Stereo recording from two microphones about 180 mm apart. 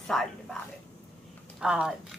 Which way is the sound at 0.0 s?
5° left (ahead or behind).